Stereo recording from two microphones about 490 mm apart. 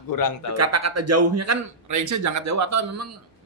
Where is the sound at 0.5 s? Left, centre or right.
Right.